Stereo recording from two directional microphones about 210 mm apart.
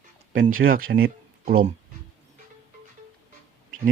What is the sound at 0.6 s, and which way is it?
Speech, 50° right (ahead or behind).